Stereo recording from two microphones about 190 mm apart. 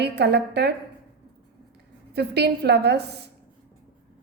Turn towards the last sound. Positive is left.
turn(degrees=-60)  # may be behind; listen again after turning